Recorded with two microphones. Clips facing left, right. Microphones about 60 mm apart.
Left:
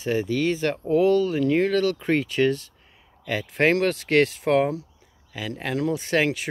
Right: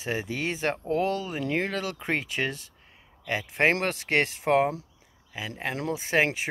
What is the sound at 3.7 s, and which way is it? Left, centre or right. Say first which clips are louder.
Speech: left 5 dB; centre.